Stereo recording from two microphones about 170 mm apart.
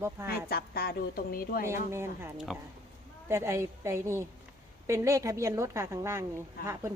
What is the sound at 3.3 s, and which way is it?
A woman's voice, 15° right (ahead or behind).